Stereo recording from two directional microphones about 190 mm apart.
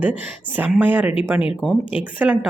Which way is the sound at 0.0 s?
10° right (ahead or behind).